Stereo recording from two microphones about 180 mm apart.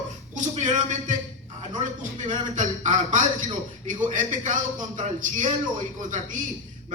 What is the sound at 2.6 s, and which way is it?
A man's voice, 45° right (ahead or behind).